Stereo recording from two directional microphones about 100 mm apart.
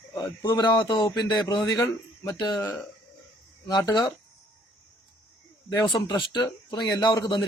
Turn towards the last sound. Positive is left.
turn(degrees=45)  # may be behind; listen again after turning